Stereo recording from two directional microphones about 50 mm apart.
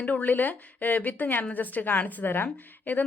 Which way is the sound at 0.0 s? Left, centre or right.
Left.